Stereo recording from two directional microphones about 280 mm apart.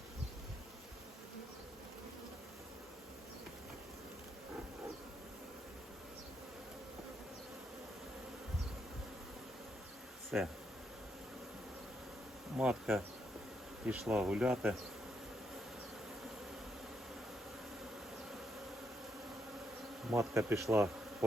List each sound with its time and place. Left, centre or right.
10.3 s bee: centre
12.5 s bee: centre
20.1 s bee: centre